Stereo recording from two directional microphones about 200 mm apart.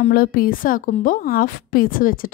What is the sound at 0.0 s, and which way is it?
A woman's voice, 45° left (ahead or behind).